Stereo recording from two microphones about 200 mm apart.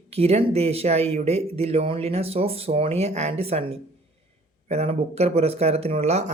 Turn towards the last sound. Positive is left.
turn(degrees=-35)  # may be behind; listen again after turning